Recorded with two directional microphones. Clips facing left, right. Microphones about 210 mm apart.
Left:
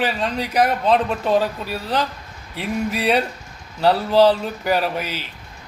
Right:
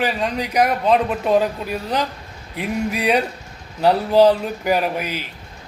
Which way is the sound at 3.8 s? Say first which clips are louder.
Right 1 dB; 10° right (ahead or behind).